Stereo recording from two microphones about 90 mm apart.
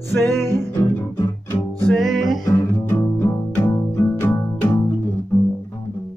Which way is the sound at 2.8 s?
20° left (ahead or behind).